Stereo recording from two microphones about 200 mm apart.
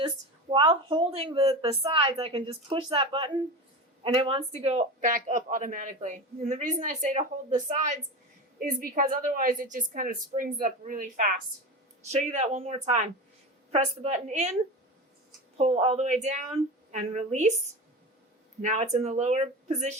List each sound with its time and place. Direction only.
0.5 s a woman's voice: 25° right (ahead or behind)
15.5 s speech: 35° right (ahead or behind)
18.6 s speech: 35° right (ahead or behind)